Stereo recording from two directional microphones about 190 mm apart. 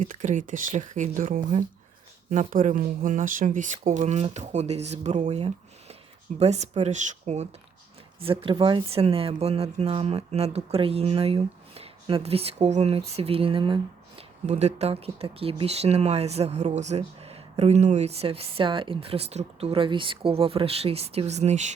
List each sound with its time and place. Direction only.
0.0 s speech: 45° right (ahead or behind)